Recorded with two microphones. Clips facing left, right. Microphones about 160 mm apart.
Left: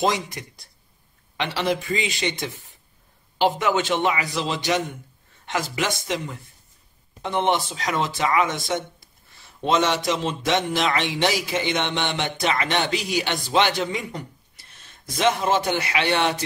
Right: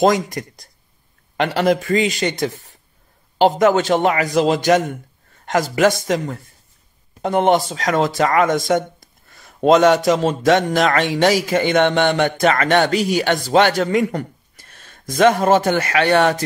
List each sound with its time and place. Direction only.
0.0 s speech: 45° right (ahead or behind)